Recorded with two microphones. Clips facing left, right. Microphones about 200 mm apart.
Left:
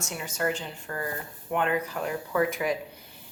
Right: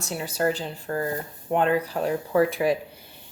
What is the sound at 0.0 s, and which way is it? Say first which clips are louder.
Speech: right 5 dB; 35° right (ahead or behind).